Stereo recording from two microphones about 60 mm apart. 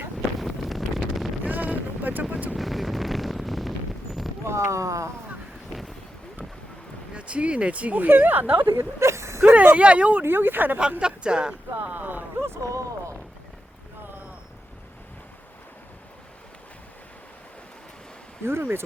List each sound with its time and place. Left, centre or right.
0.3 s wind noise: centre
1.5 s boat: right
2.3 s vehicle: right
2.6 s vehicle: centre
4.4 s speech: right
5.7 s a sound: centre
7.1 s speech: centre
8.7 s a sound: right
9.6 s speech: right
10.2 s speech: right
11.0 s speech: centre
11.8 s speech: right
12.6 s speech: right
18.4 s speech: right